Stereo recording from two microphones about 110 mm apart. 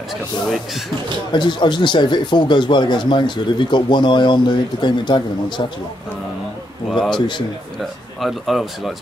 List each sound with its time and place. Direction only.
1.3 s speech: 45° left (ahead or behind)
6.9 s a man's voice: centre (ahead or behind)
7.2 s speech: 45° left (ahead or behind)
8.2 s speech: centre (ahead or behind)